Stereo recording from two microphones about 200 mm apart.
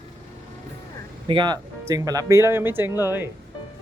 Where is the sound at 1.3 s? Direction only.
20° right (ahead or behind).